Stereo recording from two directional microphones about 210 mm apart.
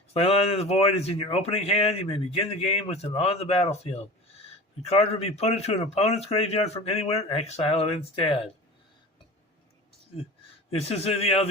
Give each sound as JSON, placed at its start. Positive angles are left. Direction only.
{"t": 0.1, "sound": "speech", "side_deg": 30}
{"t": 10.7, "sound": "speech", "side_deg": 30}